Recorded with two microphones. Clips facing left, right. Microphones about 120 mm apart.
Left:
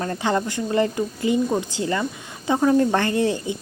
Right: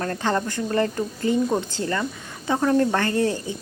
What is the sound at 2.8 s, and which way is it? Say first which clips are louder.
Speech: left 1 dB; 20° left (ahead or behind).